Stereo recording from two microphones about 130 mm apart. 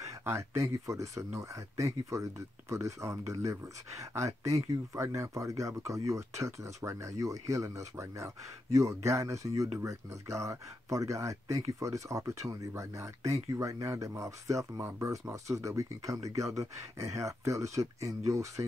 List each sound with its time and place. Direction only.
0.0 s speech: 20° right (ahead or behind)